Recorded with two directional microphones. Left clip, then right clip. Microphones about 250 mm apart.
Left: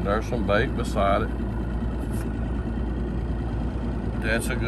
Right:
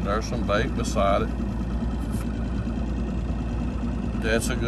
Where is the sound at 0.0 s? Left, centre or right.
Centre.